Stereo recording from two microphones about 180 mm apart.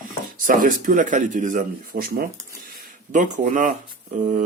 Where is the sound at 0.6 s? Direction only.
50° right (ahead or behind).